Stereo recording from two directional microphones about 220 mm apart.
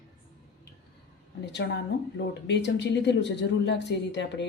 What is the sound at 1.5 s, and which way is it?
Speech, 50° left (ahead or behind).